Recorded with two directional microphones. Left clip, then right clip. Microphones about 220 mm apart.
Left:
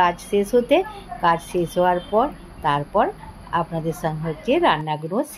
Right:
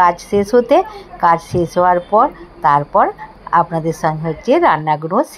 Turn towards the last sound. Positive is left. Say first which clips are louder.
# right 9 dB
turn(degrees=-20)  # may be behind; listen again after turning